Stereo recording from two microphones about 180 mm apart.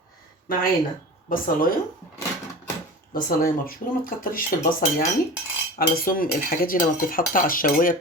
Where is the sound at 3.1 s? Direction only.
50° left (ahead or behind).